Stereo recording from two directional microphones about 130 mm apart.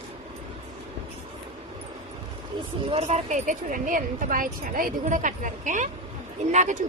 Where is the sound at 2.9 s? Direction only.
55° right (ahead or behind).